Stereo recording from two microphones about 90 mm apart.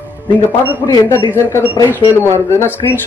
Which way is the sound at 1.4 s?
35° left (ahead or behind).